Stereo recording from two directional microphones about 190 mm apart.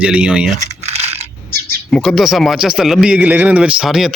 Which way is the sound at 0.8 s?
35° right (ahead or behind).